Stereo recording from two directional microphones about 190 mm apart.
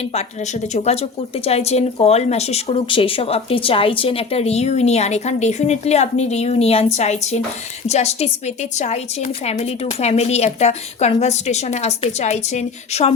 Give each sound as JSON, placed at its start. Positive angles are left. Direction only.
{"t": 0.7, "sound": "speech", "side_deg": 35}